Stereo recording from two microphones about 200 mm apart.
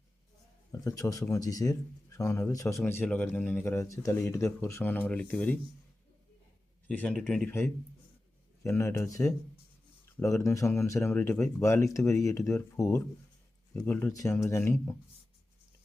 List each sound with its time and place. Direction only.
0.7 s speech: 15° left (ahead or behind)
6.8 s speech: 5° left (ahead or behind)